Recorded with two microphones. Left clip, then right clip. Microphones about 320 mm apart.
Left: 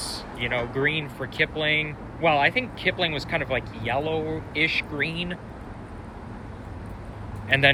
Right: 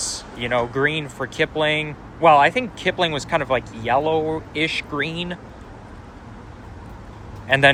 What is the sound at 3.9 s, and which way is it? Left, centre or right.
Speech, centre.